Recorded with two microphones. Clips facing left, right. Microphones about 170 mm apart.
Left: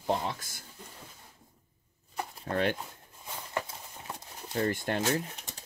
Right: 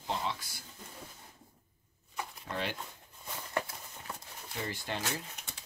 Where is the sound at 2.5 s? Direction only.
55° left (ahead or behind).